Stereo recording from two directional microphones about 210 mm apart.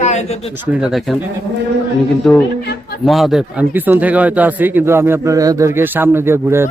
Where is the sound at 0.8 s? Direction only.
Centre (ahead or behind).